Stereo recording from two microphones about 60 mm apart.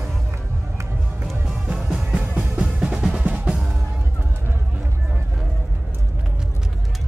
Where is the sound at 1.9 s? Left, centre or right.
Centre.